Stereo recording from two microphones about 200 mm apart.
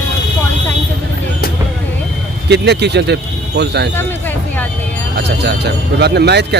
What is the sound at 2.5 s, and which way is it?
Speech, 55° right (ahead or behind).